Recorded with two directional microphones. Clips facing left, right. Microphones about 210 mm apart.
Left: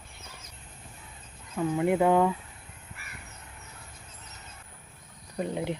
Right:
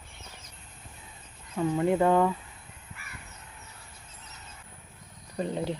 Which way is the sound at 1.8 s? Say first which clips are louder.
Left 1 dB; 15° left (ahead or behind).